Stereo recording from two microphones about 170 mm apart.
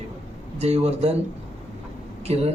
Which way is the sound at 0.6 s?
35° right (ahead or behind).